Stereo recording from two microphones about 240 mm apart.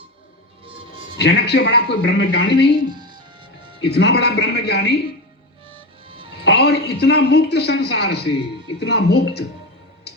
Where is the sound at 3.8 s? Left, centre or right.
Left.